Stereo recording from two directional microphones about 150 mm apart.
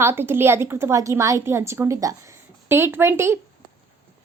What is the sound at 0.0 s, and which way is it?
A woman's voice, 15° right (ahead or behind).